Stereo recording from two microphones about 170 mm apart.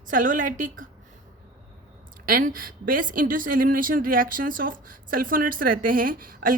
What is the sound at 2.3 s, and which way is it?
A woman's voice, 55° right (ahead or behind).